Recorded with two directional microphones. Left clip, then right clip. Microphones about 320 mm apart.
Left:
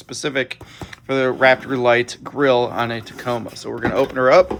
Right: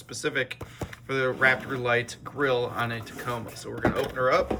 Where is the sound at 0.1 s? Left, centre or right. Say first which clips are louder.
Left 6 dB; centre.